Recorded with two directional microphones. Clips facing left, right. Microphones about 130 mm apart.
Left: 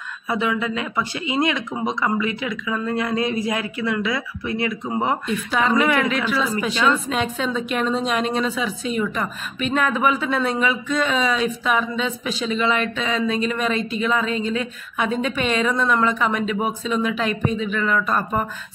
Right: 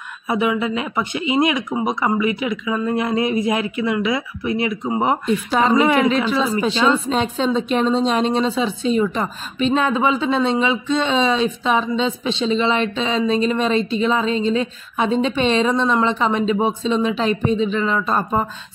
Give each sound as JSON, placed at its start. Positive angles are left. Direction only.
{"t": 0.3, "sound": "speech", "side_deg": -20}
{"t": 5.2, "sound": "speech", "side_deg": -30}